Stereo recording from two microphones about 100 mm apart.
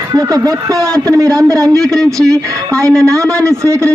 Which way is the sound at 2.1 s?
35° right (ahead or behind).